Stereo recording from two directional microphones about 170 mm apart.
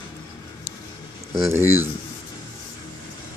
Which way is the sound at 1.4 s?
15° right (ahead or behind).